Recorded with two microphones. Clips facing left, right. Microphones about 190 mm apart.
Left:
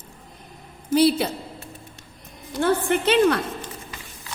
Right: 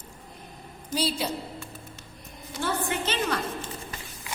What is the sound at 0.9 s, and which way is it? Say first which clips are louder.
Speech: left 10 dB; 60° left (ahead or behind).